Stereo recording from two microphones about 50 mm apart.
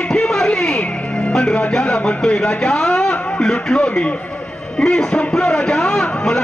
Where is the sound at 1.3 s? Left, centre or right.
Centre.